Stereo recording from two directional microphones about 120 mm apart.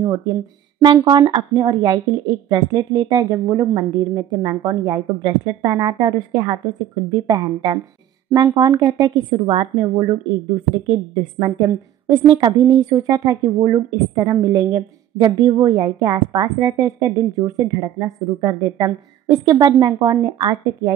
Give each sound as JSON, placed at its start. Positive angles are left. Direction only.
{"t": 0.0, "sound": "speech", "side_deg": -30}